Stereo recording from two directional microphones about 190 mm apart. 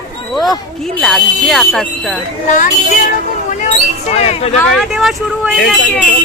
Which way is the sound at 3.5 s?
40° left (ahead or behind).